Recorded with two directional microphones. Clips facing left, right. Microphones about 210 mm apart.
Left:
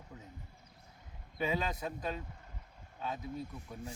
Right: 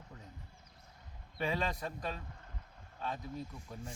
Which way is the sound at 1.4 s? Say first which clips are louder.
Left 1 dB; 5° left (ahead or behind).